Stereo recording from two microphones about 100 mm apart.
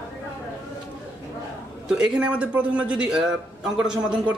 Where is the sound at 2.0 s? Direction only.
10° right (ahead or behind).